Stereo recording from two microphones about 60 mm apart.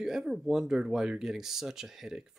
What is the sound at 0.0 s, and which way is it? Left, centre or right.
Speech, centre.